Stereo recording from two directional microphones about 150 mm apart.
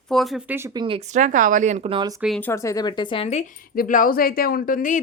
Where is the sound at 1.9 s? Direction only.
30° right (ahead or behind).